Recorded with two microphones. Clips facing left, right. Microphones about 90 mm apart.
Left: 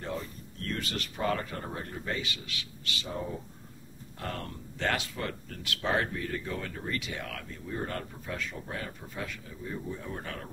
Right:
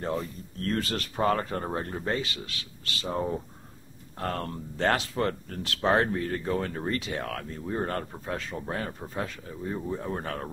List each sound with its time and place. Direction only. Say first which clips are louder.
0.7 s speech: right 6 dB; 40° right (ahead or behind)
4.2 s speech: right 6 dB; 40° right (ahead or behind)